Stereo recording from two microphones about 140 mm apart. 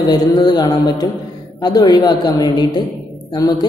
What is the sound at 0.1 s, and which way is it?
A woman's voice, 30° left (ahead or behind).